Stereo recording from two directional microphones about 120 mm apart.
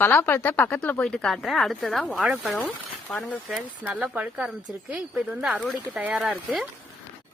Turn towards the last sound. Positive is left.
turn(degrees=-5)  # may be behind; listen again after turning